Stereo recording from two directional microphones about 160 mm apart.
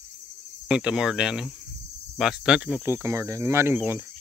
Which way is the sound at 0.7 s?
5° right (ahead or behind).